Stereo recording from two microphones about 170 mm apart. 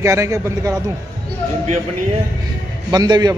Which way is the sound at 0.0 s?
15° right (ahead or behind).